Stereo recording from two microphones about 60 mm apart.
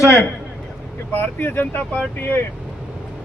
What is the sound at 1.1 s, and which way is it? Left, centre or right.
Speech, left.